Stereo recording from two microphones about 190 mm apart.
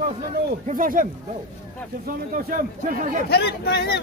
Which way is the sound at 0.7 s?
45° right (ahead or behind).